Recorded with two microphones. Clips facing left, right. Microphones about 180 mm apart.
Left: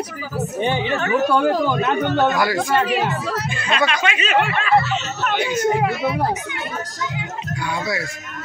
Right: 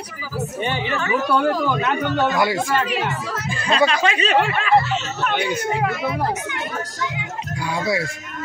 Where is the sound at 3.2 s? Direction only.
60° left (ahead or behind).